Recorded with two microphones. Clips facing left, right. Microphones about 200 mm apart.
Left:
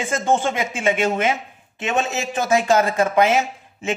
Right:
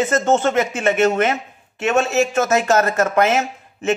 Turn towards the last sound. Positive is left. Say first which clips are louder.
# right 1 dB
turn(degrees=15)  # may be behind; listen again after turning